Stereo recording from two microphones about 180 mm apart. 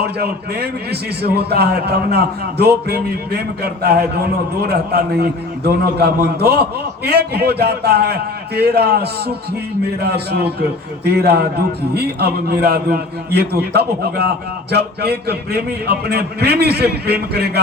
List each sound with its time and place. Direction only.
0.0 s a man's voice: 60° right (ahead or behind)